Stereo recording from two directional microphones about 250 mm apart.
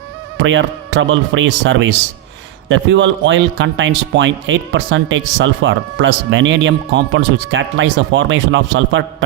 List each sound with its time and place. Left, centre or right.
0.3 s a man's voice: right